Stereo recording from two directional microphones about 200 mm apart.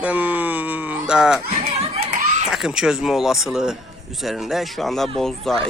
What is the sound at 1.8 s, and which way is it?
Crowd, 30° right (ahead or behind).